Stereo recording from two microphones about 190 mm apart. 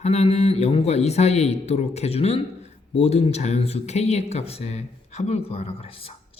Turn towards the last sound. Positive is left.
turn(degrees=30)  # may be behind; listen again after turning